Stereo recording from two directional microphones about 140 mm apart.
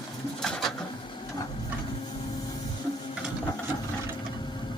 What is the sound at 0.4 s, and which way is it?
Pigeon, 5° left (ahead or behind).